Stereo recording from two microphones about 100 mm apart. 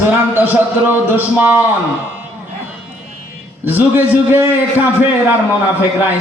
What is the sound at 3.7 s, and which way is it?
Speech, 20° right (ahead or behind).